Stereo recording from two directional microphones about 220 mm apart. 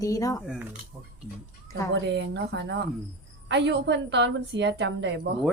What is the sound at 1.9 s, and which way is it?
A woman's voice, 55° right (ahead or behind).